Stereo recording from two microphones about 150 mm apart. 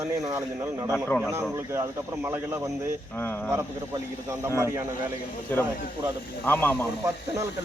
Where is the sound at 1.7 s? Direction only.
15° right (ahead or behind).